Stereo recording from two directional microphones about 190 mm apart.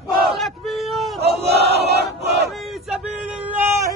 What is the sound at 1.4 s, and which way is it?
Battle cry, 60° right (ahead or behind).